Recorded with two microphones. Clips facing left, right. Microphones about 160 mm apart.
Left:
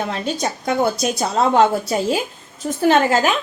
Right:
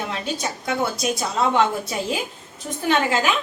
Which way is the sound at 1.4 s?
40° left (ahead or behind).